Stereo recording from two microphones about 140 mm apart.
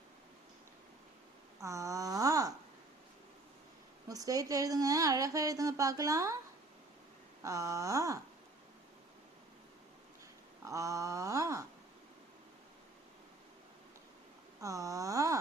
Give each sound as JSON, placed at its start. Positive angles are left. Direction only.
{"t": 1.6, "sound": "a sound", "side_deg": -20}
{"t": 4.1, "sound": "speech", "side_deg": -25}
{"t": 7.4, "sound": "speech", "side_deg": -20}
{"t": 10.7, "sound": "speech", "side_deg": -25}
{"t": 14.6, "sound": "speech", "side_deg": -25}